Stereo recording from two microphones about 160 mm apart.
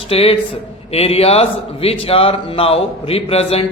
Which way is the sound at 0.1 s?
35° left (ahead or behind).